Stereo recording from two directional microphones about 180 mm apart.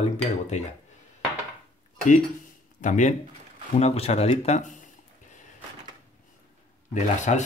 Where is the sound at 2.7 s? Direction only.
45° left (ahead or behind).